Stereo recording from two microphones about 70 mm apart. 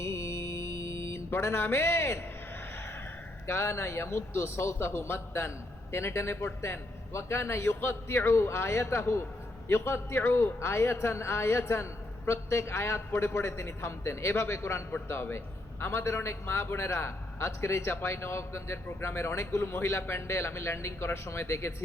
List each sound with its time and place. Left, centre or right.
0.0 s music: left
3.4 s a man's voice: left